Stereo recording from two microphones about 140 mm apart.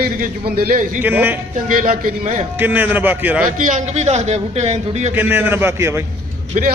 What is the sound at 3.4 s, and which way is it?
A man's voice, 65° right (ahead or behind).